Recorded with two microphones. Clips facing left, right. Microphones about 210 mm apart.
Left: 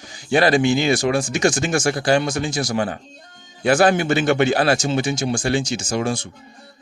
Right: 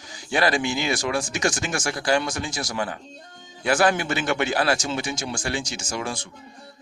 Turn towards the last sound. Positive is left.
turn(degrees=25)  # may be behind; listen again after turning